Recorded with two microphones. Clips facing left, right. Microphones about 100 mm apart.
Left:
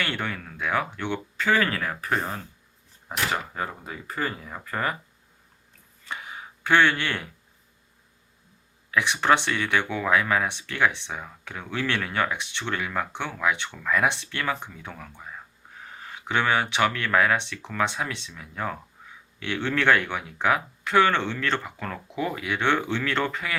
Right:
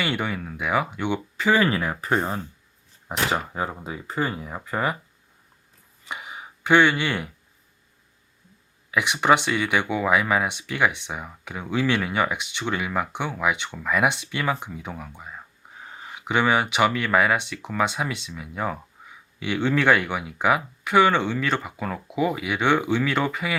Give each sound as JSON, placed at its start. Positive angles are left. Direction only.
{"t": 0.0, "sound": "speech", "side_deg": -15}
{"t": 6.1, "sound": "a sound", "side_deg": -15}
{"t": 8.9, "sound": "speech", "side_deg": -15}